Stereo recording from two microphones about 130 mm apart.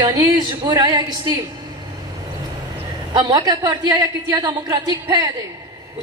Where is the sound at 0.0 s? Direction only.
30° right (ahead or behind).